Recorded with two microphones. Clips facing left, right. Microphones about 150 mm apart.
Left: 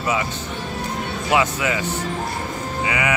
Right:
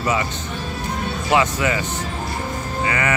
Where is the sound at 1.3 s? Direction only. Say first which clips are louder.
Right 1 dB; 5° left (ahead or behind).